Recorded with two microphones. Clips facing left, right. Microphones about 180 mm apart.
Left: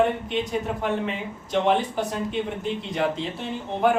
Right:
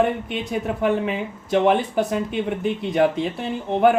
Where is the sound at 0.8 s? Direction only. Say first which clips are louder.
Right 5 dB; 60° right (ahead or behind).